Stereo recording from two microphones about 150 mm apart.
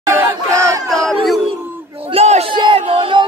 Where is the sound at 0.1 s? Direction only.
15° right (ahead or behind).